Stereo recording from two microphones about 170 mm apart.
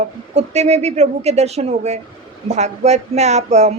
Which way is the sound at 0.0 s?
40° right (ahead or behind).